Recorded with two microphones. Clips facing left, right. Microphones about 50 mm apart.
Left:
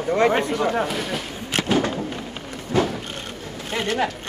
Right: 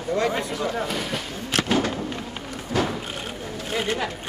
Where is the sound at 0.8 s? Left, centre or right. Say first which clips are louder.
Left 2 dB; centre.